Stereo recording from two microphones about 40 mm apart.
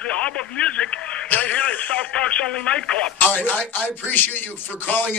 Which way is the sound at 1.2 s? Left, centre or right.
Left.